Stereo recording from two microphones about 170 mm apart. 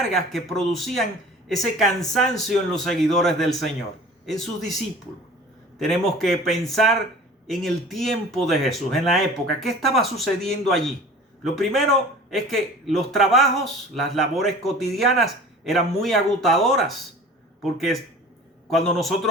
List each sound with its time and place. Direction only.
0.0 s a man's voice: centre (ahead or behind)
5.8 s a man's voice: centre (ahead or behind)